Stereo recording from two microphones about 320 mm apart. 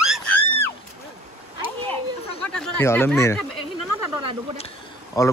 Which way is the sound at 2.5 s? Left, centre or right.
Centre.